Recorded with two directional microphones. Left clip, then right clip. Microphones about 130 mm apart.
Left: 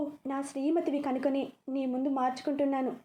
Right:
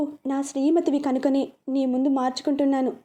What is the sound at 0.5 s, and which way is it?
A woman's voice, 45° right (ahead or behind).